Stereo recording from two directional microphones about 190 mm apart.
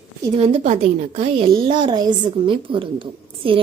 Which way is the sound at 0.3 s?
35° right (ahead or behind).